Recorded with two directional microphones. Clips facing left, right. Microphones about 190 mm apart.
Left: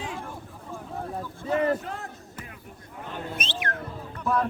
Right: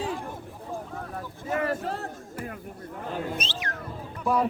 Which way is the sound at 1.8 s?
35° right (ahead or behind).